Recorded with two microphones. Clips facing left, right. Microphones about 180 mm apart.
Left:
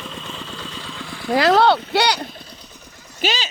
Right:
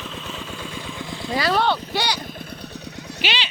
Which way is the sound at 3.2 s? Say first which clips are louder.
Left 4 dB; 40° left (ahead or behind).